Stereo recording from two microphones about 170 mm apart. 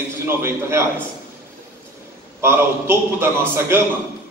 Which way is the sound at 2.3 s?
15° right (ahead or behind).